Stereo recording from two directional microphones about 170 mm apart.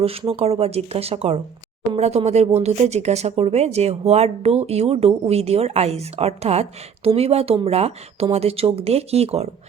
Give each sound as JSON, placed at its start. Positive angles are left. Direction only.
{"t": 0.0, "sound": "speech", "side_deg": -35}